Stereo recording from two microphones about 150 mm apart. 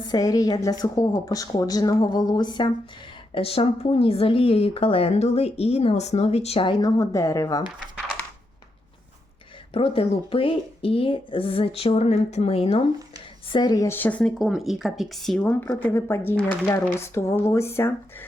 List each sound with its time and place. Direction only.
0.1 s a woman's voice: 25° left (ahead or behind)
3.3 s speech: 40° left (ahead or behind); by 7.6 s 20° left (ahead or behind)
9.7 s speech: 40° left (ahead or behind)
13.5 s speech: 30° left (ahead or behind); by 15.4 s centre (ahead or behind)
15.4 s speech: 10° left (ahead or behind)